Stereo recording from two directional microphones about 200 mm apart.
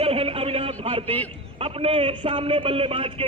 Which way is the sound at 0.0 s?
30° right (ahead or behind).